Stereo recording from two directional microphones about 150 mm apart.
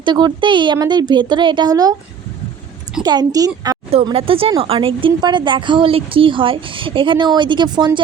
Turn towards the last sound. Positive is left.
turn(degrees=-30)  # may be behind; listen again after turning